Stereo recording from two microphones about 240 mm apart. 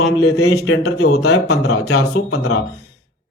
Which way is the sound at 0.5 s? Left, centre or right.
Left.